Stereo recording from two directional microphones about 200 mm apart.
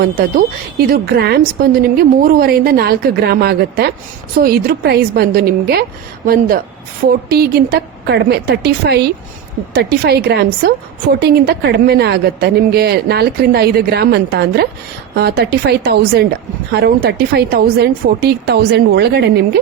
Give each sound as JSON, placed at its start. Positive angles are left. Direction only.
{"t": 0.0, "sound": "a woman's voice", "side_deg": -50}